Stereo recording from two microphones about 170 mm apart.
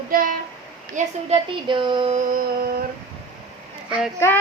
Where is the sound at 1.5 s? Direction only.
30° right (ahead or behind).